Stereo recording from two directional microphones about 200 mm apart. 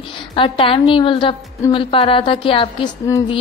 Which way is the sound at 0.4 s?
25° left (ahead or behind).